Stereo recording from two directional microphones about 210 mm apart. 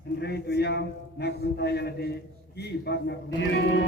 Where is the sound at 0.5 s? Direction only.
50° left (ahead or behind).